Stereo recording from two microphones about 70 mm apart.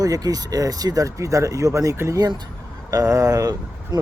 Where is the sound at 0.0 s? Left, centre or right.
Right.